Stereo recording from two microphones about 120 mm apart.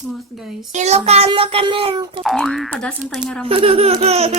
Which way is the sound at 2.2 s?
5° left (ahead or behind).